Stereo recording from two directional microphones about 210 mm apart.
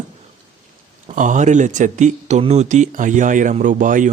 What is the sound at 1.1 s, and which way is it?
Speech, 35° right (ahead or behind).